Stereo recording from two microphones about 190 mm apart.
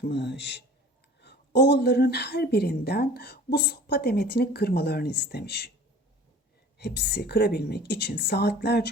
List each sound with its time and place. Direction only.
0.0 s a woman's voice: 65° left (ahead or behind)
6.7 s a woman's voice: 60° left (ahead or behind)